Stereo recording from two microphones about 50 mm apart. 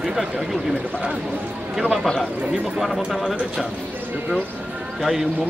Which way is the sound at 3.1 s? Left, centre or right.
Centre.